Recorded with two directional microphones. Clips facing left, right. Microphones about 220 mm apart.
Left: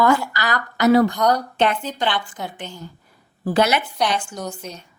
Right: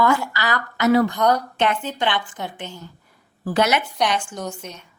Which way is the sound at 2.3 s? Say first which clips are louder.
Even; 10° left (ahead or behind).